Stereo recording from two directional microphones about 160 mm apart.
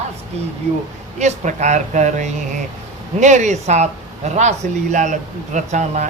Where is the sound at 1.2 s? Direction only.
50° right (ahead or behind).